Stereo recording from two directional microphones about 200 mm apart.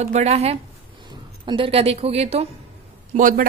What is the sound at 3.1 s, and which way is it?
Speech, 40° right (ahead or behind).